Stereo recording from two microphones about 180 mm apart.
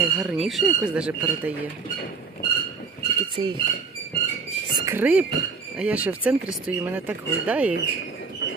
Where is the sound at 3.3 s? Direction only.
25° right (ahead or behind).